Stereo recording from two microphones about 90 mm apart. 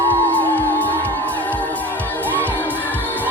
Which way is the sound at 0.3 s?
20° left (ahead or behind).